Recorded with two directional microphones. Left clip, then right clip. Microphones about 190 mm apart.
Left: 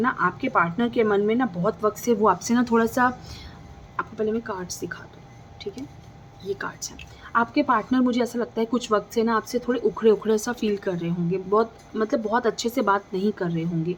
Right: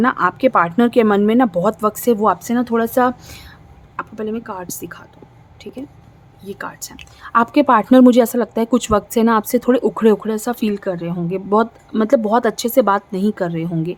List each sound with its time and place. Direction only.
0.0 s speech: 40° right (ahead or behind)
6.5 s speech: 35° right (ahead or behind)
10.2 s speech: 30° right (ahead or behind)
11.5 s speech: 50° right (ahead or behind)